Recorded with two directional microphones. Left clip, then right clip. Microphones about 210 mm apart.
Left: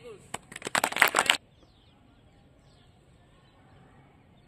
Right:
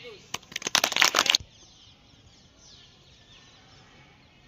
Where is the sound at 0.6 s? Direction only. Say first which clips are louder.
Right 3 dB; 20° right (ahead or behind).